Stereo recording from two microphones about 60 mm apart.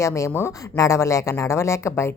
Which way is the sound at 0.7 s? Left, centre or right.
Left.